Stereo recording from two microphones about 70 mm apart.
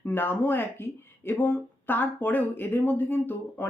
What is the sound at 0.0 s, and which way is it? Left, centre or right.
A woman's voice, left.